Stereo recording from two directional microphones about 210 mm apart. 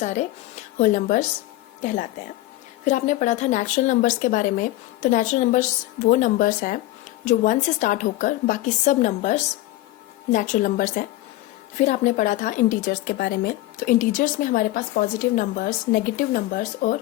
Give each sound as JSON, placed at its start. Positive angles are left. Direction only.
{"t": 0.0, "sound": "speech", "side_deg": 35}
{"t": 2.8, "sound": "speech", "side_deg": 35}